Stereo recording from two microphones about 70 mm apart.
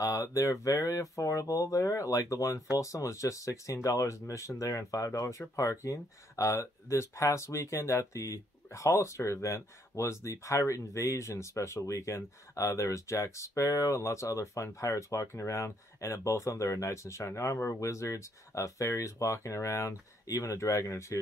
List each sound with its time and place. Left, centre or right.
0.0 s speech: left